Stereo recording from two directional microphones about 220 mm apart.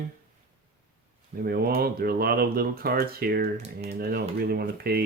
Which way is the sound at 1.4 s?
45° right (ahead or behind).